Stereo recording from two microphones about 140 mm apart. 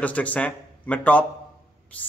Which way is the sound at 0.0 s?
10° left (ahead or behind).